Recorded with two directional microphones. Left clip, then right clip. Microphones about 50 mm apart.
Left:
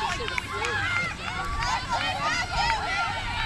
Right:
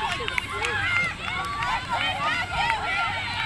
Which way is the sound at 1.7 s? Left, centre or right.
Left.